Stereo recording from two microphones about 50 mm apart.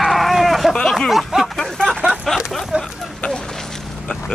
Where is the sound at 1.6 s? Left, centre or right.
Centre.